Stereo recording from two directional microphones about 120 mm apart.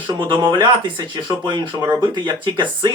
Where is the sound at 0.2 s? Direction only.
45° right (ahead or behind).